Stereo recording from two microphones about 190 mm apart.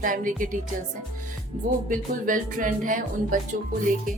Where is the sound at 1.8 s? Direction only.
45° right (ahead or behind).